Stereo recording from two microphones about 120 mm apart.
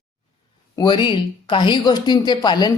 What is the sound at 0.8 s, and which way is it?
A woman's voice, 40° left (ahead or behind).